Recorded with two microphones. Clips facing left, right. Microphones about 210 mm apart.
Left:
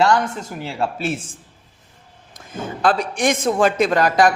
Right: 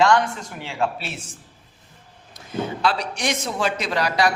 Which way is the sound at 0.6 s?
40° left (ahead or behind).